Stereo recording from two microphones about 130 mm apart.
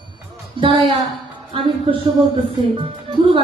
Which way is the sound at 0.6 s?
40° right (ahead or behind).